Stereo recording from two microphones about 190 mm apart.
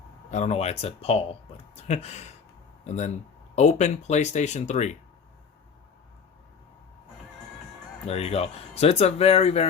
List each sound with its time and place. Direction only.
0.3 s speech: 35° left (ahead or behind)
8.0 s speech: 35° left (ahead or behind)